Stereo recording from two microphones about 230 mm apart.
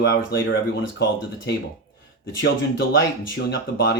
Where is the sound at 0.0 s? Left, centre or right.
Left.